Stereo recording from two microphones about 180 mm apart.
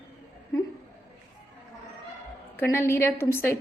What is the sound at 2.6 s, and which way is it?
A woman's voice, 15° left (ahead or behind).